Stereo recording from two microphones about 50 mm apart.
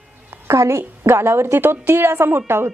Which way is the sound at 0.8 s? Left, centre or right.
Right.